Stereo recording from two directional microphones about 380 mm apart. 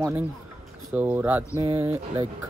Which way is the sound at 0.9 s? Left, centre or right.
Centre.